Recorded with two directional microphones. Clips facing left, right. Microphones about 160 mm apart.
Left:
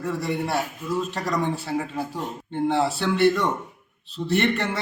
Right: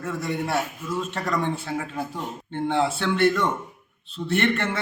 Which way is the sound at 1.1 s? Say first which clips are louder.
Left 1 dB; 10° left (ahead or behind).